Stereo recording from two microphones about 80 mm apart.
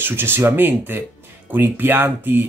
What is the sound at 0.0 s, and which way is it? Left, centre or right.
Speech, right.